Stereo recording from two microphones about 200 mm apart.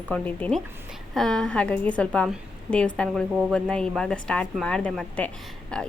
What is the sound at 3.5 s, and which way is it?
A woman's voice, 5° left (ahead or behind).